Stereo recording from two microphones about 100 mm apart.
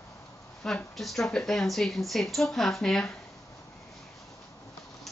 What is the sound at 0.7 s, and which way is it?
A woman's voice, 5° left (ahead or behind).